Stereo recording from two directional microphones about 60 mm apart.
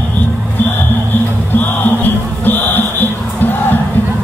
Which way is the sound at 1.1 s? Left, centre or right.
Left.